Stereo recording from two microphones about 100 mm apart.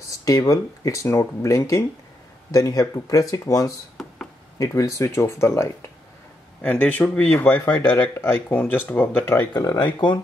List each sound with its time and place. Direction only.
0.2 s speech: 35° left (ahead or behind)
6.6 s speech: 15° left (ahead or behind)
9.5 s speech: 40° left (ahead or behind)